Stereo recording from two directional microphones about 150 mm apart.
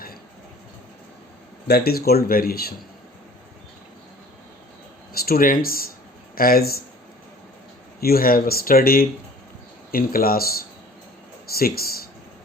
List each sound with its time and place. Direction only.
1.6 s speech: 90° left
5.1 s speech: 85° left
8.0 s speech: 80° left
11.5 s speech: 90° left